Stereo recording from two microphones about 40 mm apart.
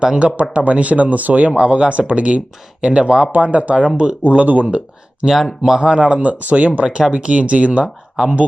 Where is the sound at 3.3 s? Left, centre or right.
Right.